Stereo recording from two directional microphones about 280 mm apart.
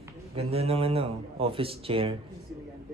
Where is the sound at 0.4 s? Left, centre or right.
Right.